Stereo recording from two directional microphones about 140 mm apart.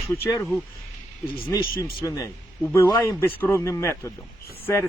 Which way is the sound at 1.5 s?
20° left (ahead or behind).